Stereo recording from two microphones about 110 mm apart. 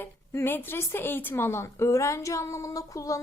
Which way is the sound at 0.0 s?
20° left (ahead or behind).